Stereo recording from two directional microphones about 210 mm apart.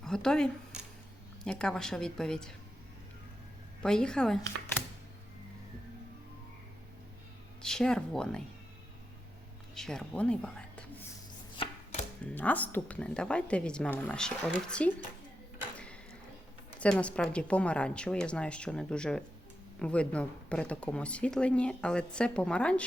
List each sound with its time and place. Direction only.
0.0 s speech: 5° left (ahead or behind)
3.8 s speech: 5° left (ahead or behind)
7.6 s speech: 5° left (ahead or behind)
9.7 s speech: 5° left (ahead or behind)
11.5 s chopping: 25° left (ahead or behind)
12.2 s speech: 10° left (ahead or behind)
16.8 s speech: 5° left (ahead or behind)